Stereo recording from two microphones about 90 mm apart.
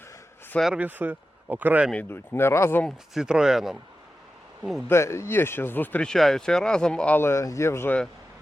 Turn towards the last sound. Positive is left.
turn(degrees=30)  # may be behind; listen again after turning